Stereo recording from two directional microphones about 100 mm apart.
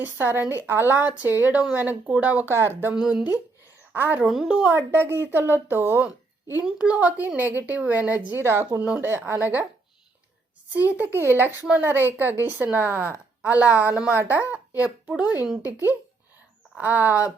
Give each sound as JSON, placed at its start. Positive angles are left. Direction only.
{"t": 0.0, "sound": "a woman's voice", "side_deg": -20}
{"t": 2.9, "sound": "a woman's voice", "side_deg": -5}
{"t": 3.9, "sound": "speech", "side_deg": -20}
{"t": 4.3, "sound": "speech", "side_deg": -5}
{"t": 6.7, "sound": "a woman's voice", "side_deg": -10}
{"t": 10.7, "sound": "a woman's voice", "side_deg": -15}